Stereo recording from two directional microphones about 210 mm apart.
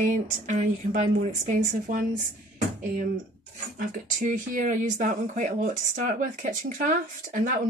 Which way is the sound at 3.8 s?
40° right (ahead or behind).